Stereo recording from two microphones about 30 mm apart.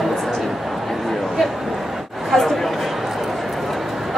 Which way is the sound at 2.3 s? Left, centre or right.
Centre.